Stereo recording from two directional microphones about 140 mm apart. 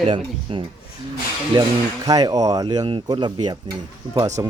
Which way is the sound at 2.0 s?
25° right (ahead or behind).